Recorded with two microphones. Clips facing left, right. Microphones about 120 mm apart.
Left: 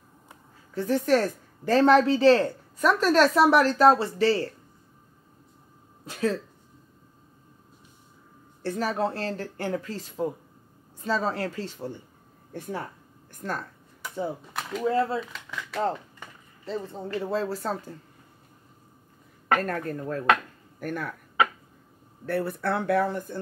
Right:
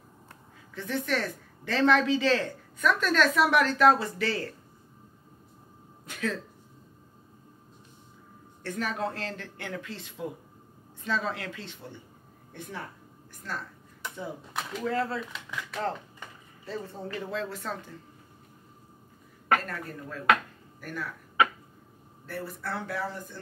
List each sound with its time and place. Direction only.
0.7 s a woman's voice: 40° left (ahead or behind)
6.0 s speech: 35° left (ahead or behind)
8.6 s a woman's voice: 35° left (ahead or behind)
14.8 s speech: 25° left (ahead or behind)
16.6 s speech: 25° left (ahead or behind)
17.3 s a woman's voice: 35° left (ahead or behind)
19.6 s a woman's voice: 50° left (ahead or behind)
22.2 s speech: 65° left (ahead or behind)